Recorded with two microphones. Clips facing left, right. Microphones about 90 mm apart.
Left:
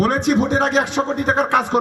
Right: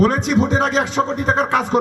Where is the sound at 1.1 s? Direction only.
50° left (ahead or behind).